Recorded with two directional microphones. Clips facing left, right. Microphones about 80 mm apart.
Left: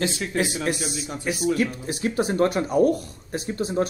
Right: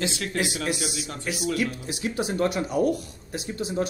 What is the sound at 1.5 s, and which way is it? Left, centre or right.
Speech, left.